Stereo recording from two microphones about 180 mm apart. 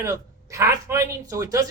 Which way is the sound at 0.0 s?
15° right (ahead or behind).